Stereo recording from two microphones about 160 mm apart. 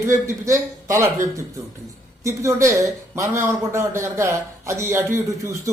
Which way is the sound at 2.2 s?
20° right (ahead or behind).